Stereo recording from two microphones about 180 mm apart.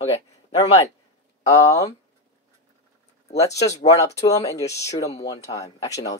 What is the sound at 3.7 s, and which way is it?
Speech, 20° left (ahead or behind).